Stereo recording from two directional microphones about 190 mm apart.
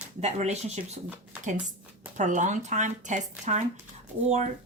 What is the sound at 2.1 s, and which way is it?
Speech, 40° right (ahead or behind).